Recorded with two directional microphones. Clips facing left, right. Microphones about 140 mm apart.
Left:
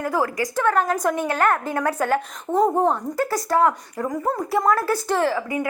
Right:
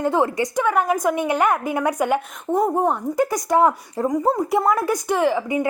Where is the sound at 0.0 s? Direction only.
25° right (ahead or behind).